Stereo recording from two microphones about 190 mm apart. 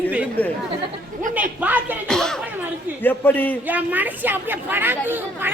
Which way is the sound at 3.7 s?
10° right (ahead or behind).